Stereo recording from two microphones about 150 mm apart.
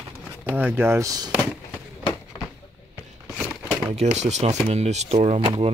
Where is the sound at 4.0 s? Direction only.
50° right (ahead or behind).